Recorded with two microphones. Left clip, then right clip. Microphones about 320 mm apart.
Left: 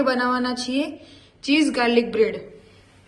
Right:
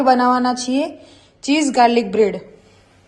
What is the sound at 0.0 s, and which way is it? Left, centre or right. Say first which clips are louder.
A woman's voice: right 7 dB; right.